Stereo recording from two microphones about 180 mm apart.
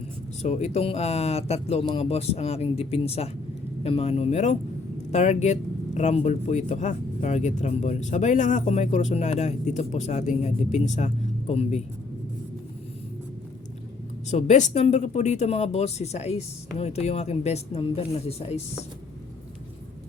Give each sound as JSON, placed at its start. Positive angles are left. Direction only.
{"t": 0.4, "sound": "speech", "side_deg": 40}
{"t": 14.3, "sound": "speech", "side_deg": 40}